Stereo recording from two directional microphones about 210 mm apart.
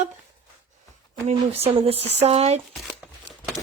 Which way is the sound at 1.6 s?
30° right (ahead or behind).